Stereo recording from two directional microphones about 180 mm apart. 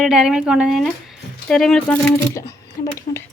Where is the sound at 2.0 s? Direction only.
15° left (ahead or behind).